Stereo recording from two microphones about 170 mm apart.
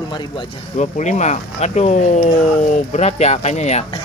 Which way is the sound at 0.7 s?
45° left (ahead or behind).